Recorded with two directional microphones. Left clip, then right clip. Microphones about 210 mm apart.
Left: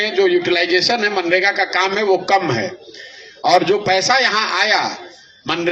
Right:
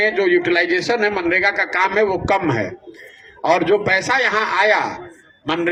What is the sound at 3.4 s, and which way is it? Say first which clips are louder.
A man's voice: left 2 dB; 55° right (ahead or behind).